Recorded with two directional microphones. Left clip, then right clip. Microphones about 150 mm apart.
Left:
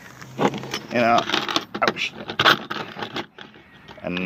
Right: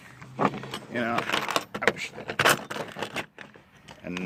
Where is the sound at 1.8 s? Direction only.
5° left (ahead or behind).